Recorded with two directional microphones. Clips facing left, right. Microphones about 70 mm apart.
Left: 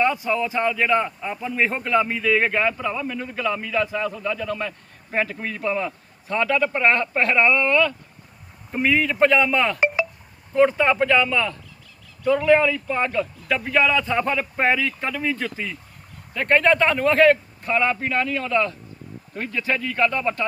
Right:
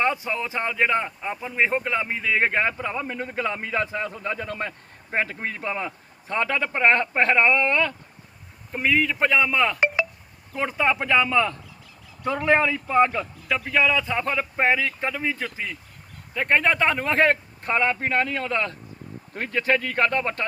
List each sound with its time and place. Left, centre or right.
0.3 s a man's voice: right
5.1 s a man's voice: right
8.7 s a man's voice: centre; by 11.5 s right
12.7 s a man's voice: centre
13.5 s a man's voice: centre
17.2 s a man's voice: right